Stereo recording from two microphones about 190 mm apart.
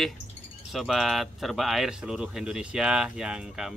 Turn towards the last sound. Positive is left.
turn(degrees=-5)  # may be behind; listen again after turning